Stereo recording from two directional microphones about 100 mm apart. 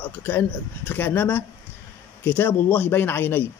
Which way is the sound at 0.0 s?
20° left (ahead or behind).